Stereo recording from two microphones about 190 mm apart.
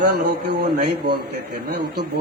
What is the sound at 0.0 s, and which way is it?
Speech, 55° right (ahead or behind).